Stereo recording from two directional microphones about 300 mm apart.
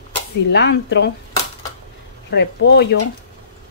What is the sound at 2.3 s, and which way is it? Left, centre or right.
Speech, left.